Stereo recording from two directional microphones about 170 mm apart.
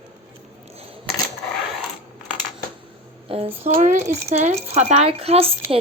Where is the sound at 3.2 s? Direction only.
35° right (ahead or behind).